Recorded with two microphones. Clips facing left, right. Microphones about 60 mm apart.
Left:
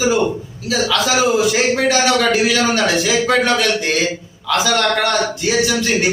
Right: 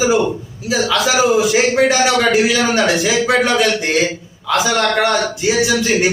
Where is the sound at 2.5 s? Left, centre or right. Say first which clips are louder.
Right 1 dB; right.